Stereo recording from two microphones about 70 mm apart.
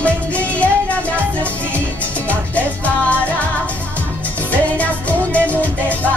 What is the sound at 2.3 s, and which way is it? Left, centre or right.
Music, left.